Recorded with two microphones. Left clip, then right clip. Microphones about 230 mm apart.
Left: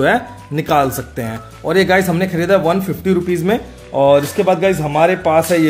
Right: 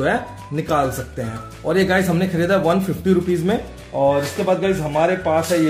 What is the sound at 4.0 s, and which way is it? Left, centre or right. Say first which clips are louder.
Speech: left 6 dB; left.